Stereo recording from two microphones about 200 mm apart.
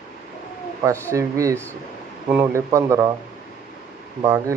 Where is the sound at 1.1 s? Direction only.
15° right (ahead or behind).